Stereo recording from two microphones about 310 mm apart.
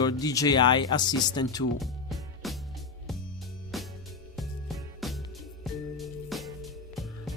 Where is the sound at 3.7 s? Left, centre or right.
Centre.